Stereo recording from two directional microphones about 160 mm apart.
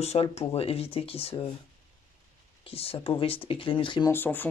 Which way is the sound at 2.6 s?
35° left (ahead or behind).